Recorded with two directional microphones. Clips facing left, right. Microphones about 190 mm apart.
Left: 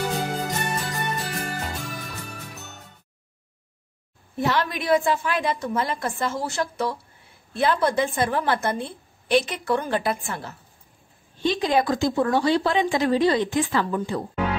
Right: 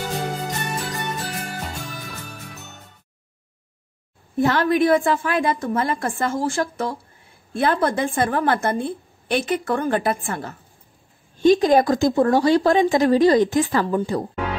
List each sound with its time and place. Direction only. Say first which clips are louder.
0.5 s music: even; centre (ahead or behind)
4.4 s a woman's voice: right 7 dB; 50° right (ahead or behind)